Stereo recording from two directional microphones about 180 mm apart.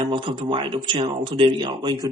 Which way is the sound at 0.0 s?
25° right (ahead or behind).